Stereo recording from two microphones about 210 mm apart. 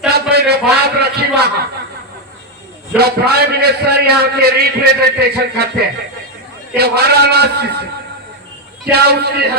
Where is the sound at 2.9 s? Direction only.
50° right (ahead or behind).